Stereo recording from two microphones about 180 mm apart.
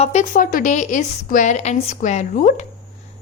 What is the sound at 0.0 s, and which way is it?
A woman's voice, 40° left (ahead or behind).